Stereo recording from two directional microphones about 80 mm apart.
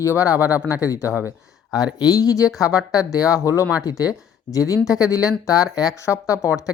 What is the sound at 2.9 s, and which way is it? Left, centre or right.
Speech, left.